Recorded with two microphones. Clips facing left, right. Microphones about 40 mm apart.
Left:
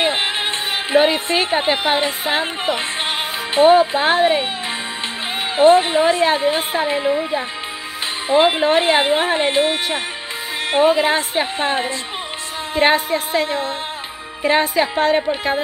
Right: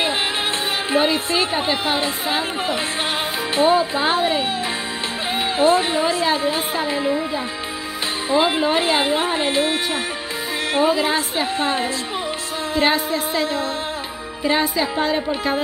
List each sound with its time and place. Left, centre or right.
0.8 s a woman's voice: left
5.6 s a woman's voice: left
8.3 s a woman's voice: left
12.7 s music: left
14.4 s a woman's voice: left